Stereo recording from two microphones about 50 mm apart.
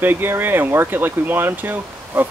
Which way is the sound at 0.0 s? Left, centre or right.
Right.